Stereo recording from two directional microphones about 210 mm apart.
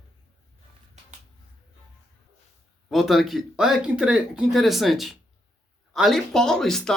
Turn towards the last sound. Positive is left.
turn(degrees=5)  # may be behind; listen again after turning